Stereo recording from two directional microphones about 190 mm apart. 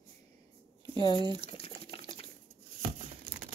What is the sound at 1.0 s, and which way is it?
Drip, 25° left (ahead or behind).